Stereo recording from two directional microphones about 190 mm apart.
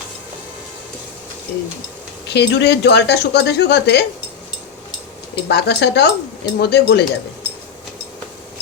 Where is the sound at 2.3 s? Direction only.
60° left (ahead or behind).